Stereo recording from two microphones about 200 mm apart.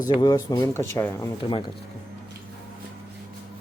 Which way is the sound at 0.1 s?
20° left (ahead or behind).